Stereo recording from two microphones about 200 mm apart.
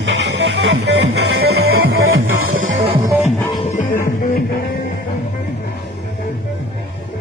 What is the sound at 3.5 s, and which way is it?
Music, 35° left (ahead or behind).